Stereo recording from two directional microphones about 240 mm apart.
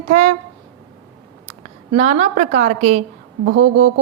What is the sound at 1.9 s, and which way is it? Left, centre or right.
A woman's voice, right.